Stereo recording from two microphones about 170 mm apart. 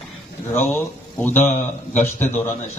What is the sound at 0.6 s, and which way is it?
Speech, 15° left (ahead or behind).